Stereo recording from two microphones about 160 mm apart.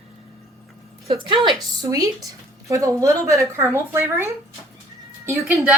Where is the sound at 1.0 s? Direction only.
35° right (ahead or behind).